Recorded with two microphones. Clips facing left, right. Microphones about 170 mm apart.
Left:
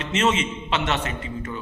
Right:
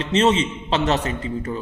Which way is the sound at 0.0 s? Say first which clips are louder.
Right 4 dB; 35° right (ahead or behind).